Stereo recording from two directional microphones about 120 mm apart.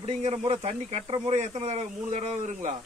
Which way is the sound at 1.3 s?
70° right (ahead or behind).